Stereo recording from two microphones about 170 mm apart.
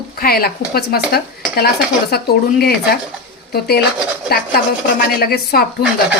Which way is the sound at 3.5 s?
70° left (ahead or behind).